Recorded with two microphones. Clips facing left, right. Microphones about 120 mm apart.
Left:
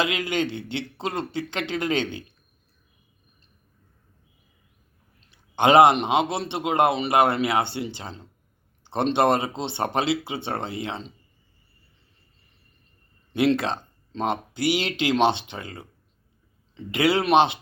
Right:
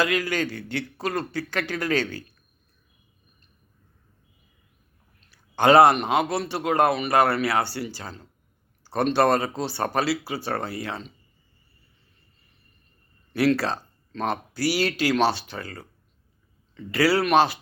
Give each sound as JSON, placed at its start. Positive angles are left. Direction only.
{"t": 0.0, "sound": "a man's voice", "side_deg": 20}
{"t": 5.3, "sound": "a man's voice", "side_deg": 20}
{"t": 13.3, "sound": "a man's voice", "side_deg": 20}